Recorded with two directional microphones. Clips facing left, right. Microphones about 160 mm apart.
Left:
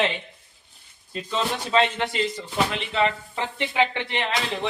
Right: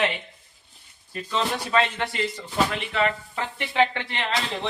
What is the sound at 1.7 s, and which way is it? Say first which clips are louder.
A man's voice: left 3 dB; 20° left (ahead or behind).